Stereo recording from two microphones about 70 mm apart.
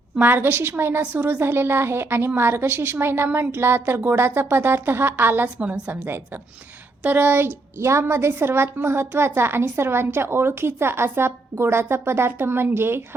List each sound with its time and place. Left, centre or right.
0.2 s a woman's voice: right
5.5 s a woman's voice: centre
6.1 s a woman's voice: right